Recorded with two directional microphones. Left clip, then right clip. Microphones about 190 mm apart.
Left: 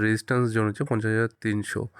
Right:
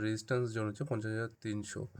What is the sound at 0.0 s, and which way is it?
Speech, 40° left (ahead or behind).